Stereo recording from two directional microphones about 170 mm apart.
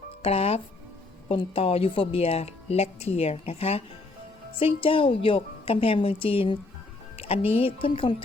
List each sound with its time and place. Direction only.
0.2 s speech: 35° left (ahead or behind)